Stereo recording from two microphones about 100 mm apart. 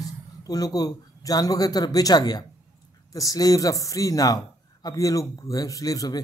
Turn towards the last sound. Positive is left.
turn(degrees=35)  # may be behind; listen again after turning